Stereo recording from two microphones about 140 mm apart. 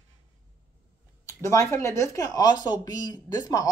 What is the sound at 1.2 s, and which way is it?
Speech, 20° left (ahead or behind).